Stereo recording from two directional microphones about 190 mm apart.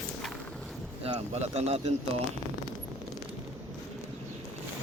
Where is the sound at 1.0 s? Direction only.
35° right (ahead or behind).